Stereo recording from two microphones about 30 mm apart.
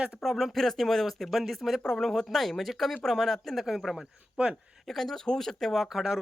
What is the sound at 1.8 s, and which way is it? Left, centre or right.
Speech, centre.